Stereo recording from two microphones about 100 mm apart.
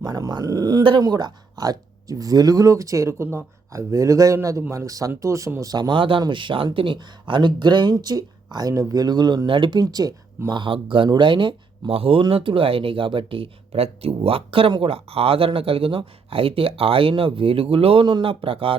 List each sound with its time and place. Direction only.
0.0 s speech: 40° right (ahead or behind)
0.8 s speech: 60° right (ahead or behind)
1.0 s speech: 40° right (ahead or behind)
6.0 s speech: 55° right (ahead or behind)
9.8 s speech: 40° right (ahead or behind)
10.5 s speech: 55° right (ahead or behind)
18.0 s speech: 55° right (ahead or behind)